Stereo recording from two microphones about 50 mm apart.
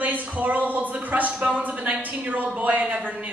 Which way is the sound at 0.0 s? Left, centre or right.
Right.